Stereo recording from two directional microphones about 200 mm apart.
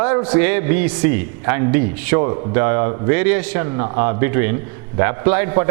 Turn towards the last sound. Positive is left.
turn(degrees=-15)  # may be behind; listen again after turning